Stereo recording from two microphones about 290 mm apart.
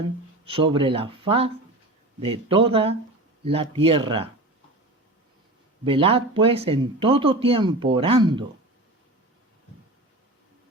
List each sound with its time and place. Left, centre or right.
0.4 s speech: centre
5.8 s speech: centre